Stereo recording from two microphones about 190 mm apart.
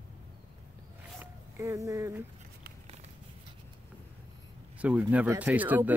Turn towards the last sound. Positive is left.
turn(degrees=-10)  # may be behind; listen again after turning